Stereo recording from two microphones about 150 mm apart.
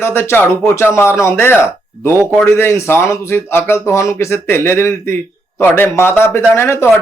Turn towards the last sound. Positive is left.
turn(degrees=15)  # may be behind; listen again after turning